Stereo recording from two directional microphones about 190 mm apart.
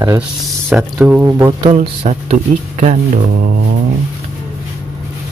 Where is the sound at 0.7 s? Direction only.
5° right (ahead or behind).